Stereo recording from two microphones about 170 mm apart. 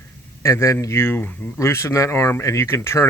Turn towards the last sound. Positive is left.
turn(degrees=15)  # may be behind; listen again after turning